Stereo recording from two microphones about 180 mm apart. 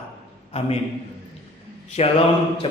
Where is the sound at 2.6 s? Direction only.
30° left (ahead or behind).